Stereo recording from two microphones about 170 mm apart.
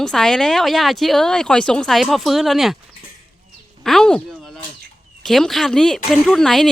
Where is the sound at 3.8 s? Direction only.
Centre (ahead or behind).